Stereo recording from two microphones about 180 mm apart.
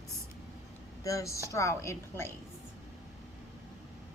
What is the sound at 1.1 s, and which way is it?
A woman's voice, 15° left (ahead or behind).